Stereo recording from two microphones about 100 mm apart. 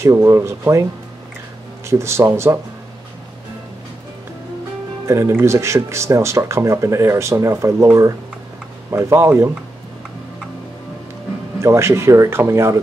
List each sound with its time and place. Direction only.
0.0 s speech: 30° right (ahead or behind)
1.9 s speech: 30° right (ahead or behind)
5.0 s speech: 30° right (ahead or behind)
11.6 s speech: 30° right (ahead or behind)